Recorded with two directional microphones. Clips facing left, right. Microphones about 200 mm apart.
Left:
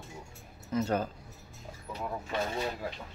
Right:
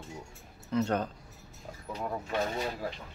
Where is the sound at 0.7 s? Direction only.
5° left (ahead or behind).